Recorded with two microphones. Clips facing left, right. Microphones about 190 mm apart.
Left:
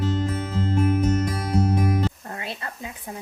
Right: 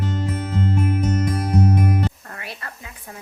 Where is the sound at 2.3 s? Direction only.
25° left (ahead or behind).